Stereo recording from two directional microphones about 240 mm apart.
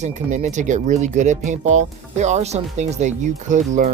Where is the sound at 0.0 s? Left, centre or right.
Right.